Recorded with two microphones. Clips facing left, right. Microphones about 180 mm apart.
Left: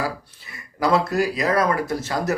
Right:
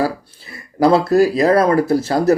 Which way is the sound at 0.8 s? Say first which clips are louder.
Right 8 dB; 35° right (ahead or behind).